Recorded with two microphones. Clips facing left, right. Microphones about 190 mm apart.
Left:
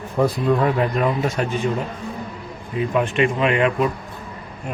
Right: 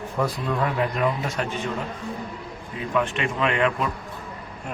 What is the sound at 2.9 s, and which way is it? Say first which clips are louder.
Speech: left 4 dB; 15° left (ahead or behind).